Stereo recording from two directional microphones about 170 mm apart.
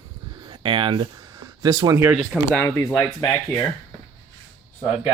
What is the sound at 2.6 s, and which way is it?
Speech, 15° left (ahead or behind).